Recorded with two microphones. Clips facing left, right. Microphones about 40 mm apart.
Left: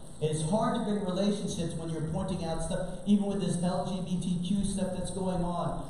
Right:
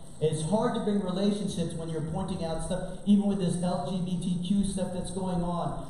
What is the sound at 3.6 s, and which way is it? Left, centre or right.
A man's voice, centre.